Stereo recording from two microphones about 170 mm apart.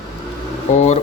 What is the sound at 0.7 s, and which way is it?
Speech, 40° left (ahead or behind).